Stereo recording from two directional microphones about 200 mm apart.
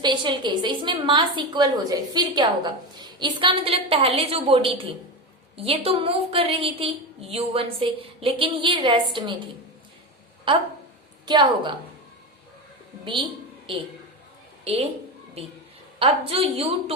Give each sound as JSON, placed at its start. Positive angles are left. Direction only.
{"t": 0.0, "sound": "a woman's voice", "side_deg": -25}
{"t": 11.3, "sound": "a woman's voice", "side_deg": -20}
{"t": 14.6, "sound": "a woman's voice", "side_deg": -30}
{"t": 16.0, "sound": "a woman's voice", "side_deg": -30}